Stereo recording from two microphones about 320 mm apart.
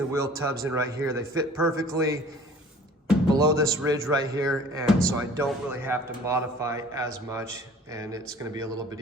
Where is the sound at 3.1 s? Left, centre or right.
Centre.